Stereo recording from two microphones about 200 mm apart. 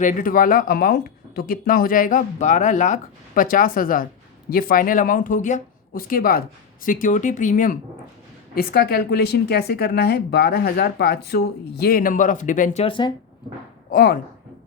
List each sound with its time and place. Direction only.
0.0 s speech: 40° left (ahead or behind); by 13.1 s 25° left (ahead or behind)
13.9 s speech: 45° left (ahead or behind)